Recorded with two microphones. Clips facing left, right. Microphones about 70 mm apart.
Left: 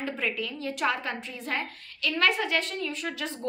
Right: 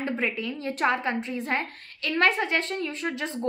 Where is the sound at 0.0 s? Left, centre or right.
Right.